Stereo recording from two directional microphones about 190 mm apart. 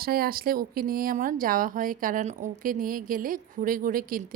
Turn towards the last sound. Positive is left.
turn(degrees=-45)  # may be behind; listen again after turning